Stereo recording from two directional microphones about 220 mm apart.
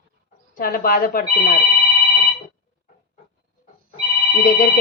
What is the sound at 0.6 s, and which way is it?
Speech, 40° left (ahead or behind).